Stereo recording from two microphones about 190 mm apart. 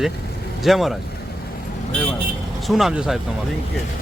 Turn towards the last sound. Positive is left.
turn(degrees=-5)  # may be behind; listen again after turning